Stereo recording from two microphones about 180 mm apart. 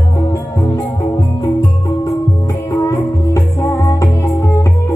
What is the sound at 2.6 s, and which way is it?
Music, 15° left (ahead or behind).